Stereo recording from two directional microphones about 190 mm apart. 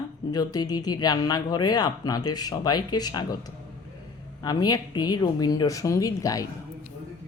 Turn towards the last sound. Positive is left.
turn(degrees=20)  # may be behind; listen again after turning